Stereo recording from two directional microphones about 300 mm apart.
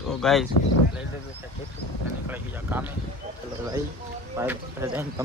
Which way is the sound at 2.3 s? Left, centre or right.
Centre.